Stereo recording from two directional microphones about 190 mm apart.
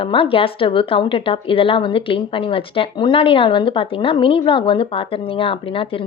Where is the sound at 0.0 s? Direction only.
25° left (ahead or behind).